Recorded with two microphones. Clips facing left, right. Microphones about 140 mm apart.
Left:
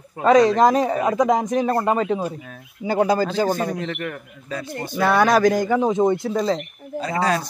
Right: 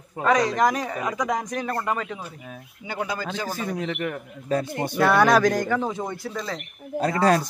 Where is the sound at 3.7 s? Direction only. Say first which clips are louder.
Even; 10° right (ahead or behind).